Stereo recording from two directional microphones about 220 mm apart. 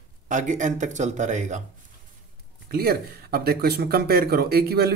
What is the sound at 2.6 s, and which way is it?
Speech, 45° right (ahead or behind).